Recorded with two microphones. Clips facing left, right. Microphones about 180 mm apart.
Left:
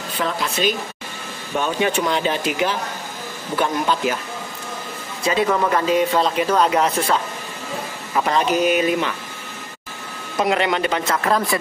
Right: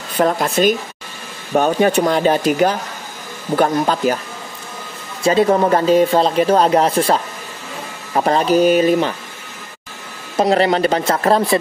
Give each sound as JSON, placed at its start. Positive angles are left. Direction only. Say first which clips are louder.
{"t": 0.2, "sound": "speech", "louder": "right 7 dB", "side_deg": -45}
{"t": 5.2, "sound": "speech", "louder": "right 6 dB", "side_deg": -35}
{"t": 10.3, "sound": "speech", "louder": "right 5 dB", "side_deg": -35}